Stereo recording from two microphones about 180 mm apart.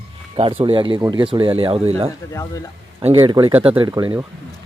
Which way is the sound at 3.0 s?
30° right (ahead or behind).